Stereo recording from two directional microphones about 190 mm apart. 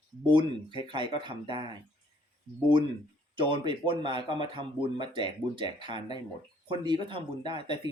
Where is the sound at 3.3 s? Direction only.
25° right (ahead or behind).